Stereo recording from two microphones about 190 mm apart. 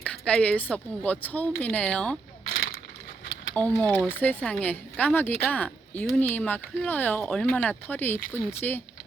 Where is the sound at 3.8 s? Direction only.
10° left (ahead or behind).